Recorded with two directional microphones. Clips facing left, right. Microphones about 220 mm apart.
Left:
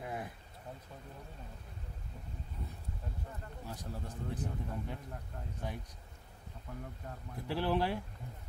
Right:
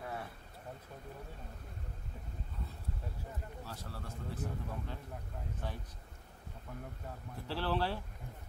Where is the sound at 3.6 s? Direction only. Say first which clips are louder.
Left 2 dB; 15° left (ahead or behind).